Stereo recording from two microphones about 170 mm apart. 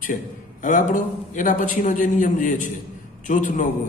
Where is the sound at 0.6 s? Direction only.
50° left (ahead or behind).